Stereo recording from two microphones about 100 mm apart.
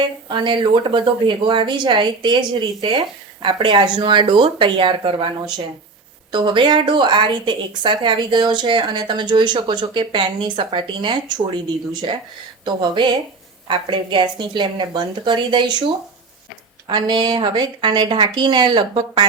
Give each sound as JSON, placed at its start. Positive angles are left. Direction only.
{"t": 0.3, "sound": "a woman's voice", "side_deg": -50}
{"t": 12.6, "sound": "a woman's voice", "side_deg": -50}
{"t": 16.8, "sound": "a woman's voice", "side_deg": -45}